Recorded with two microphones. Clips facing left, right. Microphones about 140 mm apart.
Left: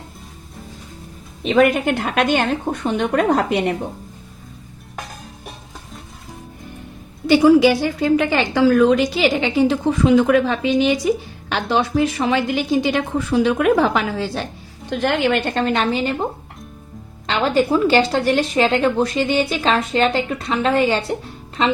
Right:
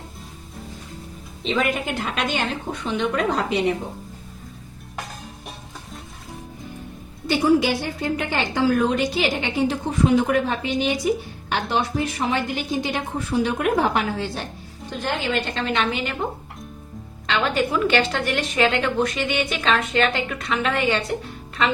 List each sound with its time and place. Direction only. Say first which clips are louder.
1.5 s a woman's voice: left 8 dB; 55° left (ahead or behind)
7.3 s a woman's voice: left 7 dB; 90° left
14.8 s a woman's voice: left 7 dB; 70° left (ahead or behind); by 16.1 s 35° left (ahead or behind)
17.2 s a woman's voice: left 5 dB; 35° left (ahead or behind)